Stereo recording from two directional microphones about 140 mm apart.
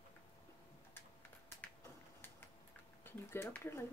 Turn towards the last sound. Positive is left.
turn(degrees=15)  # may be behind; listen again after turning